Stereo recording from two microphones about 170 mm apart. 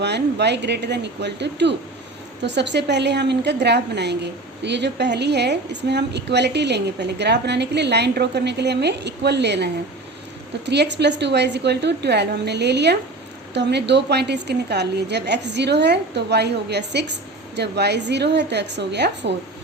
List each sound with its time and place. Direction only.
0.0 s a woman's voice: 80° right
10.7 s a woman's voice: 90° right